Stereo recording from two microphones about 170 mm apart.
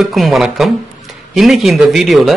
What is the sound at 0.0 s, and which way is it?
A man's voice, centre (ahead or behind).